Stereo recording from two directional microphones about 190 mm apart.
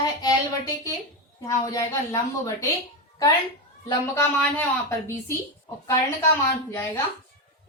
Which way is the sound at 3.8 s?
15° left (ahead or behind).